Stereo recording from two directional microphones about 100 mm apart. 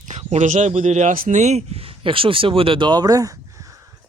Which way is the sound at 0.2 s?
90° right.